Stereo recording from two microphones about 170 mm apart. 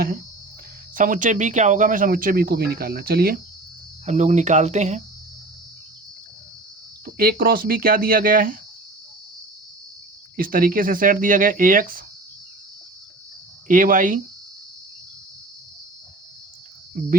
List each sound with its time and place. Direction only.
0.9 s speech: 50° right (ahead or behind)
4.0 s speech: 45° right (ahead or behind)
7.0 s speech: 60° right (ahead or behind)
10.3 s speech: 55° right (ahead or behind)
13.7 s speech: 50° right (ahead or behind)